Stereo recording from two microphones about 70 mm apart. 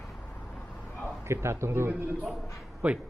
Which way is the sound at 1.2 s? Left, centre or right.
Right.